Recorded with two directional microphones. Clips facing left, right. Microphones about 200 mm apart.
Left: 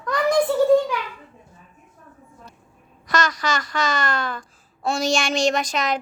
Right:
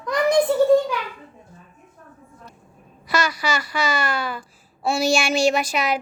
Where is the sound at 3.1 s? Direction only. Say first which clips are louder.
Even; 10° right (ahead or behind).